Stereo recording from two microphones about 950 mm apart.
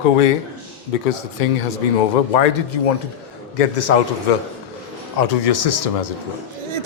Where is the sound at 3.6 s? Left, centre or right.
Left.